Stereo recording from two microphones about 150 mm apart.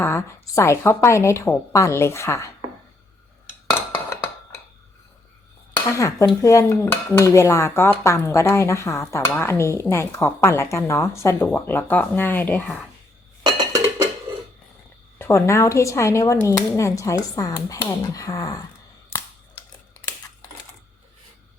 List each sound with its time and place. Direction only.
0.0 s speech: 20° left (ahead or behind)
5.7 s speech: 20° left (ahead or behind)
15.2 s speech: 20° left (ahead or behind)